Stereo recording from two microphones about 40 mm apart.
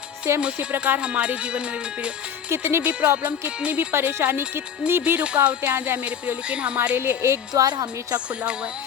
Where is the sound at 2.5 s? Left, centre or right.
Right.